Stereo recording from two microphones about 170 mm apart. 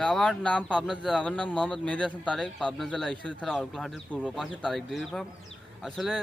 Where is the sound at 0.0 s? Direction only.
5° left (ahead or behind).